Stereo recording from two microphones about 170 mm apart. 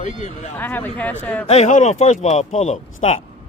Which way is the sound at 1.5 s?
45° left (ahead or behind).